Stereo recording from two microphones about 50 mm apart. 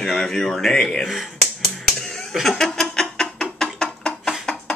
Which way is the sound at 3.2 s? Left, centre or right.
Centre.